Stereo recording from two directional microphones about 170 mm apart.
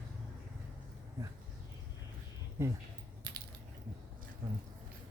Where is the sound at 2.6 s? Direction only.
15° right (ahead or behind).